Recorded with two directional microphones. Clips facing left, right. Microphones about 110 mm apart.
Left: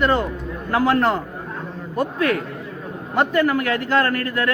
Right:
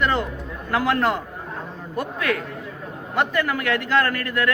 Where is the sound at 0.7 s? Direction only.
30° left (ahead or behind).